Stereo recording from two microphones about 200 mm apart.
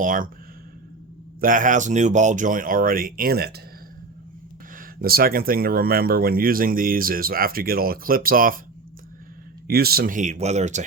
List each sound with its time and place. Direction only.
0.0 s speech: 40° right (ahead or behind)
1.4 s speech: 40° right (ahead or behind)
4.8 s speech: 50° right (ahead or behind)
9.6 s speech: 50° right (ahead or behind)